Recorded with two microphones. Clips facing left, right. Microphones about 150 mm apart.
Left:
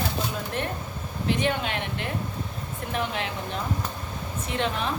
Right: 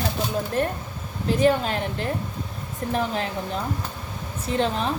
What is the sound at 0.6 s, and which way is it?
A woman's voice, 40° right (ahead or behind).